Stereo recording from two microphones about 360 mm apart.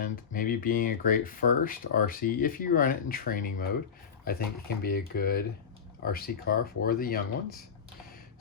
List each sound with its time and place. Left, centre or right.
0.0 s speech: left